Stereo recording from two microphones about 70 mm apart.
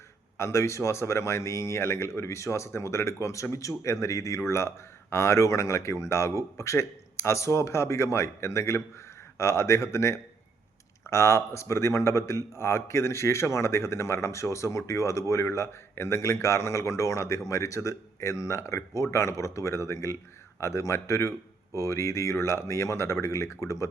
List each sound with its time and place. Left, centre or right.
0.3 s speech: left